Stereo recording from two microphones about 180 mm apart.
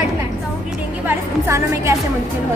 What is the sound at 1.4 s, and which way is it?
Speech, 15° right (ahead or behind).